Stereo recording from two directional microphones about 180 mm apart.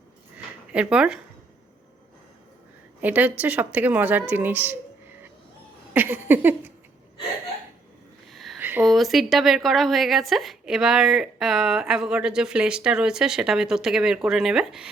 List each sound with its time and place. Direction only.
0.3 s zipper: 5° right (ahead or behind)
3.0 s speech: 10° right (ahead or behind)
5.9 s speech: 10° right (ahead or behind)
8.3 s a sound: centre (ahead or behind)
8.6 s a woman's voice: 5° right (ahead or behind)